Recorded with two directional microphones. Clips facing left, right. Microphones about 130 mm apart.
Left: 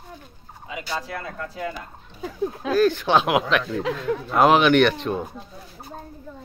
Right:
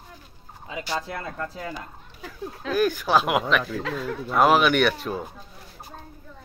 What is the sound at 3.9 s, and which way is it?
Speech, 5° right (ahead or behind).